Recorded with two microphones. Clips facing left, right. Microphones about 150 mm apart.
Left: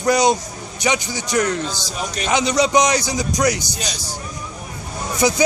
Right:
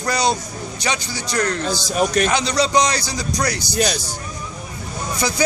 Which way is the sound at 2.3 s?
20° left (ahead or behind).